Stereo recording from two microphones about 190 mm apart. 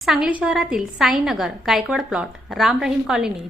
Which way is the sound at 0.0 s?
Centre (ahead or behind).